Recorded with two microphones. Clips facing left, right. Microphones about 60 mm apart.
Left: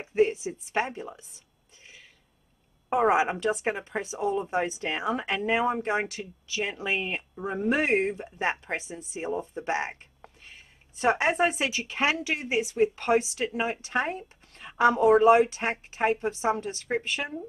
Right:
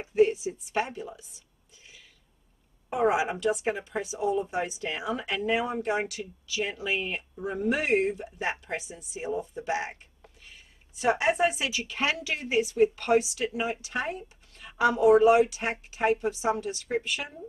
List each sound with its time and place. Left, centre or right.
0.0 s a woman's voice: left
2.9 s speech: left